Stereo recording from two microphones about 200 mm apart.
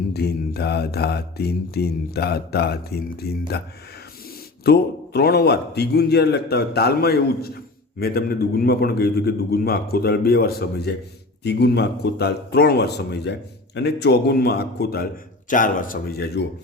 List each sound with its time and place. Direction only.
0.1 s a man's voice: 55° left (ahead or behind)
4.6 s a man's voice: 55° left (ahead or behind)